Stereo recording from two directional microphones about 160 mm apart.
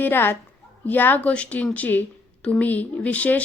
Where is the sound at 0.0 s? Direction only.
15° left (ahead or behind).